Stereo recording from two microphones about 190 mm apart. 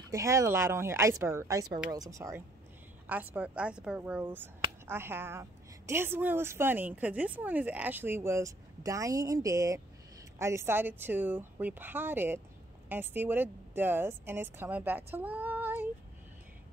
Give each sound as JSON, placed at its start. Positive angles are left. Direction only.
{"t": 0.1, "sound": "a woman's voice", "side_deg": -15}